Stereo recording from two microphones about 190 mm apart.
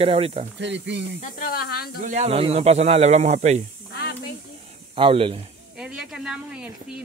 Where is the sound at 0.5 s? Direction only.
70° right (ahead or behind).